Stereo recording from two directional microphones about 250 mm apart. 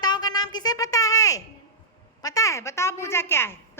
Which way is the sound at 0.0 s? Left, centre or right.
Centre.